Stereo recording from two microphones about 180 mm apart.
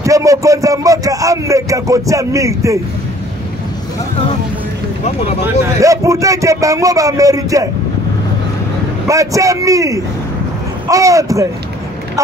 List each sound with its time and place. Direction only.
0.0 s a man's voice: 15° right (ahead or behind)
5.8 s a man's voice: 15° right (ahead or behind)
9.0 s a man's voice: 15° right (ahead or behind)